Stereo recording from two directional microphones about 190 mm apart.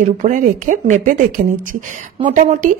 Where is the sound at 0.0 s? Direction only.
40° right (ahead or behind).